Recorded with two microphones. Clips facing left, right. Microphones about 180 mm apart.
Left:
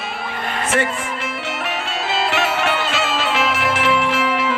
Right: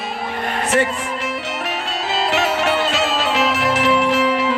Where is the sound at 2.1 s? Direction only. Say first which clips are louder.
Right 1 dB; 40° right (ahead or behind).